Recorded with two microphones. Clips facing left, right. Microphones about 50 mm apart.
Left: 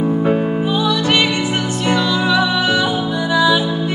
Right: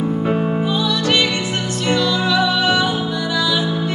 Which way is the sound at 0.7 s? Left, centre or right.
Centre.